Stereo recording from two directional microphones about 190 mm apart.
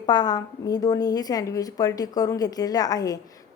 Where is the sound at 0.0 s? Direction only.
20° left (ahead or behind).